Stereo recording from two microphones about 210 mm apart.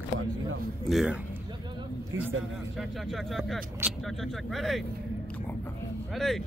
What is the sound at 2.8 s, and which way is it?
Speech, centre (ahead or behind).